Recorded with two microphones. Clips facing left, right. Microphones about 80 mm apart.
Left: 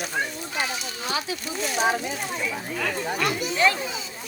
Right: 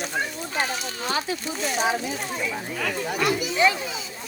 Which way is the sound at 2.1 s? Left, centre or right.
Centre.